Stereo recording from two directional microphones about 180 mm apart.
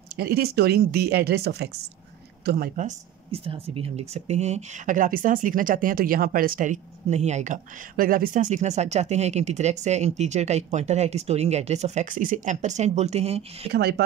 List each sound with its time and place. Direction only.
0.2 s speech: 60° right (ahead or behind); by 13.4 s 35° right (ahead or behind)
13.7 s speech: 65° right (ahead or behind)